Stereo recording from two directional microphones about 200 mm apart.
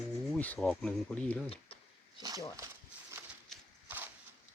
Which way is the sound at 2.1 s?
20° right (ahead or behind).